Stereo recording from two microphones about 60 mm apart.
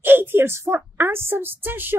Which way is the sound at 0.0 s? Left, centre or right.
Right.